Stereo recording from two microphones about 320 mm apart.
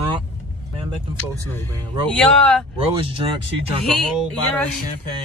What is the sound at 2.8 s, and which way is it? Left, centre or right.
Speech, centre.